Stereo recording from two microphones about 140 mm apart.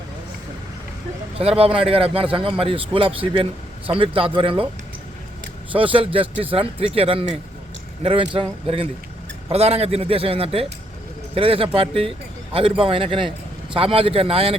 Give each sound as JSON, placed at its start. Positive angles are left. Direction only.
{"t": 1.5, "sound": "a man's voice", "side_deg": -40}
{"t": 5.7, "sound": "a man's voice", "side_deg": -40}